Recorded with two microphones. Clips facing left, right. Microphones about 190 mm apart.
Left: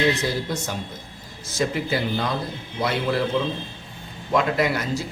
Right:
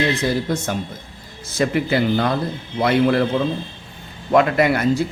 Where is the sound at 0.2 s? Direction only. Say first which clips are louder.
Right 5 dB; 55° right (ahead or behind).